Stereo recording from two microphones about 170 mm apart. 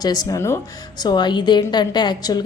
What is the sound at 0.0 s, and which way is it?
A woman's voice, 20° left (ahead or behind).